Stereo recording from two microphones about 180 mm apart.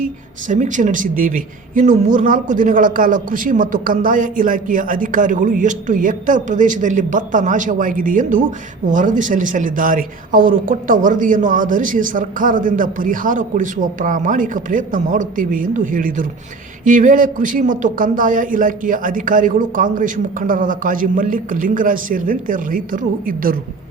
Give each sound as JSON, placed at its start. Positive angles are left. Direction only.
{"t": 0.4, "sound": "speech", "side_deg": -45}